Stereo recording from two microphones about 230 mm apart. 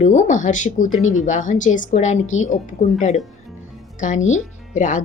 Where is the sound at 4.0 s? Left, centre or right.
Left.